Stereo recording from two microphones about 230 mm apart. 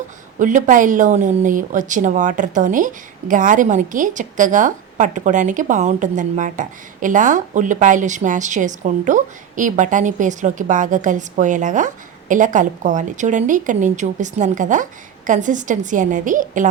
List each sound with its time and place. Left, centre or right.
0.3 s speech: right